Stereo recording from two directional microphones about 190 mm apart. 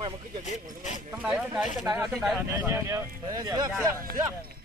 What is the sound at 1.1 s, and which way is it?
Speech, 5° right (ahead or behind).